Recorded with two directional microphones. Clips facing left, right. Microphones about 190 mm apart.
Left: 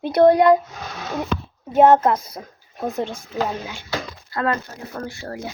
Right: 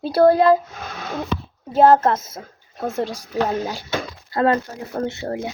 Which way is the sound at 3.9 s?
30° right (ahead or behind).